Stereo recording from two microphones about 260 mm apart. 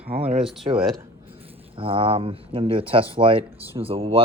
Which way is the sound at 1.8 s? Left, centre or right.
Right.